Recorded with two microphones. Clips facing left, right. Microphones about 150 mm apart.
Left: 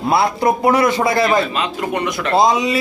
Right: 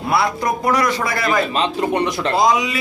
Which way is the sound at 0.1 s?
25° left (ahead or behind).